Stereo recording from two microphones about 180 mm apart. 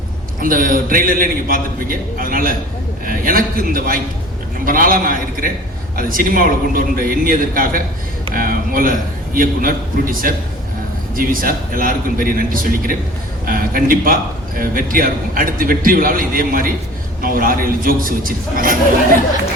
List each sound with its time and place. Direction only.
0.3 s a man's voice: 50° right (ahead or behind)